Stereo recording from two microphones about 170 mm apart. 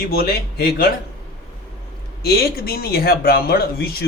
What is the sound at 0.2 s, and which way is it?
Speech, 65° left (ahead or behind).